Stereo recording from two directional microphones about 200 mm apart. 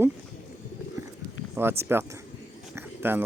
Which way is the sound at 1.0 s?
15° right (ahead or behind).